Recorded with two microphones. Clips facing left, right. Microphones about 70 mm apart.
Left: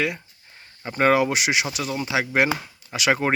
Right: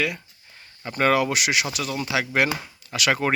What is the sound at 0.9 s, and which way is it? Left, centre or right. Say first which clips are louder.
Speech: left 2 dB; left.